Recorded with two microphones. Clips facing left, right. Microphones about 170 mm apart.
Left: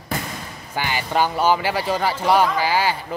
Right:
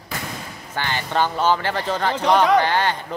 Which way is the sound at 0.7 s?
10° left (ahead or behind).